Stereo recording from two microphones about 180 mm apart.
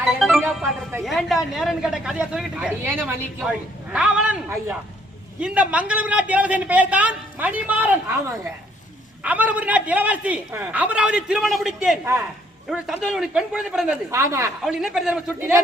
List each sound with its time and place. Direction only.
0.0 s music: centre (ahead or behind)
1.0 s a man's voice: centre (ahead or behind)
9.2 s a man's voice: 10° right (ahead or behind)
14.1 s a man's voice: 15° right (ahead or behind)
14.6 s speech: centre (ahead or behind)